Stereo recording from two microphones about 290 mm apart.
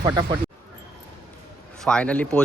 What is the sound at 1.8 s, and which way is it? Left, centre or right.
Speech, centre.